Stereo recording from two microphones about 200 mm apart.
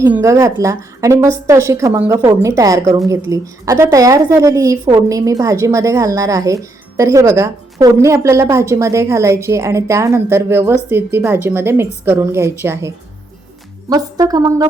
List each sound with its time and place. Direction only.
0.0 s a woman's voice: 15° right (ahead or behind)
13.9 s a woman's voice: 20° right (ahead or behind)